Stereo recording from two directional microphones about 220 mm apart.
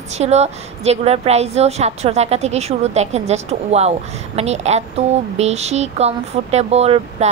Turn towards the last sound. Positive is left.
turn(degrees=-30)  # may be behind; listen again after turning